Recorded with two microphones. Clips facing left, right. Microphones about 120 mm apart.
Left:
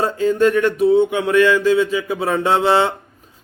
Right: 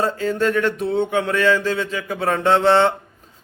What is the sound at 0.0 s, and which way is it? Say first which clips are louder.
Mantra: left 4 dB; 20° left (ahead or behind).